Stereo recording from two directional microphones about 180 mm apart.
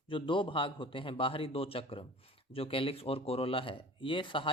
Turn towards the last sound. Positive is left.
turn(degrees=30)  # may be behind; listen again after turning